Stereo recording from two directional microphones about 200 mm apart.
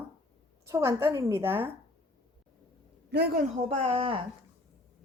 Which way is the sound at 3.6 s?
30° right (ahead or behind).